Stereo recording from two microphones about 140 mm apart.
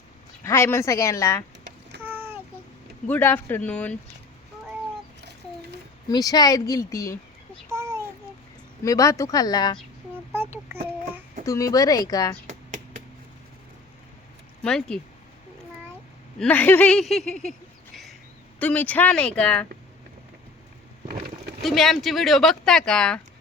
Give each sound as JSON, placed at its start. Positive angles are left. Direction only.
{"t": 0.4, "sound": "speech", "side_deg": 20}
{"t": 2.0, "sound": "a sound", "side_deg": -15}
{"t": 3.1, "sound": "speech", "side_deg": 15}
{"t": 6.1, "sound": "speech", "side_deg": 25}
{"t": 7.7, "sound": "a sound", "side_deg": -20}
{"t": 8.8, "sound": "speech", "side_deg": 25}
{"t": 10.3, "sound": "child singing", "side_deg": -15}
{"t": 11.4, "sound": "speech", "side_deg": 20}
{"t": 12.5, "sound": "a sound", "side_deg": -60}
{"t": 14.6, "sound": "speech", "side_deg": 5}
{"t": 16.4, "sound": "speech", "side_deg": 10}
{"t": 18.6, "sound": "speech", "side_deg": 10}
{"t": 21.6, "sound": "speech", "side_deg": 0}